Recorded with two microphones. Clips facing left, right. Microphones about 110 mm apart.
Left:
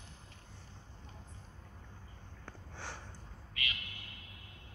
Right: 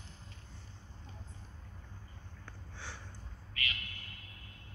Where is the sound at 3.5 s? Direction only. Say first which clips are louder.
Right 1 dB; 20° left (ahead or behind).